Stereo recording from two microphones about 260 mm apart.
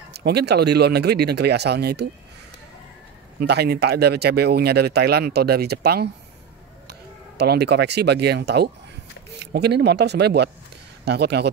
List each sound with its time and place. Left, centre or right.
0.1 s speech: right
3.3 s speech: right